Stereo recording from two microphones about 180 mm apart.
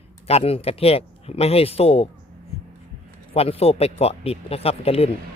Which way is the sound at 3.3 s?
35° left (ahead or behind).